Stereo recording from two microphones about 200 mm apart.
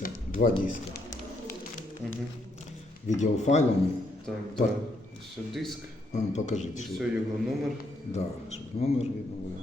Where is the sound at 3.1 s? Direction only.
35° left (ahead or behind).